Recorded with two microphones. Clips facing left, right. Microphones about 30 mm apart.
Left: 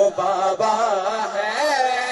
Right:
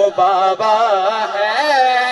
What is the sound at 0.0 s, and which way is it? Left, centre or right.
Carnatic music, right.